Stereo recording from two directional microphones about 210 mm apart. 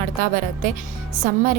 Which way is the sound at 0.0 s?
40° right (ahead or behind).